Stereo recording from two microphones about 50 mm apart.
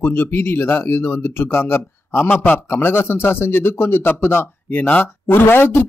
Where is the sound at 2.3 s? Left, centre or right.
Left.